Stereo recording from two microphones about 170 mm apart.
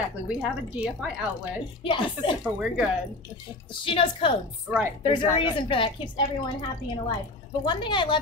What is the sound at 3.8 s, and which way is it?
A woman's voice, 30° left (ahead or behind).